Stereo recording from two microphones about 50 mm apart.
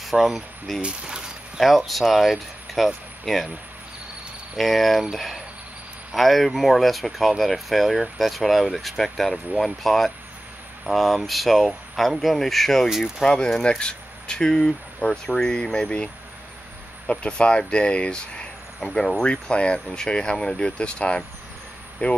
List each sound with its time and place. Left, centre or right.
0.0 s speech: centre
0.7 s speech: centre
1.6 s speech: centre
4.6 s speech: centre
13.2 s speech: centre
17.1 s speech: centre
18.9 s speech: centre
19.2 s speech: centre